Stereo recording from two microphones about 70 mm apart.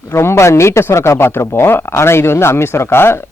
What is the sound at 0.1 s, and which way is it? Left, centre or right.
Speech, left.